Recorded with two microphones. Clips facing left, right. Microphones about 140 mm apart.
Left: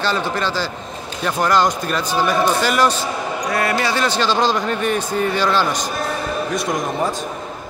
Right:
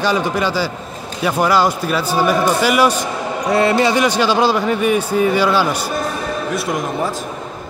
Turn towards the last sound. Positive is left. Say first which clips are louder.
# right 1 dB
turn(degrees=-5)  # may be behind; listen again after turning